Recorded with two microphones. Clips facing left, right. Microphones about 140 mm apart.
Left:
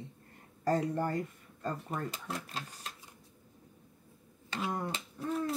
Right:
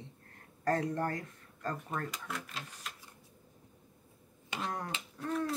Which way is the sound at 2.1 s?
35° left (ahead or behind).